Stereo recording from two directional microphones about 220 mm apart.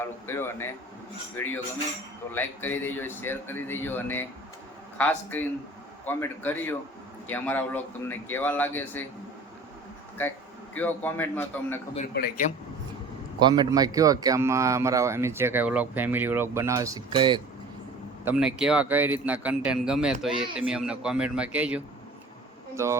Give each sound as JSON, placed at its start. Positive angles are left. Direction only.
{"t": 0.0, "sound": "speech", "side_deg": 10}
{"t": 10.8, "sound": "speech", "side_deg": 10}
{"t": 12.1, "sound": "speech", "side_deg": 45}
{"t": 13.4, "sound": "speech", "side_deg": -20}
{"t": 18.3, "sound": "speech", "side_deg": -5}